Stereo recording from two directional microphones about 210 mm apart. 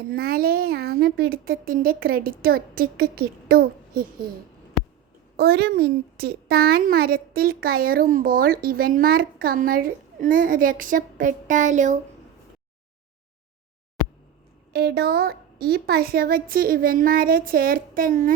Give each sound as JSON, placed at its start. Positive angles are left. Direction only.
{"t": 0.1, "sound": "a child's voice", "side_deg": -45}
{"t": 5.4, "sound": "a woman's voice", "side_deg": -50}
{"t": 14.7, "sound": "a woman's voice", "side_deg": -50}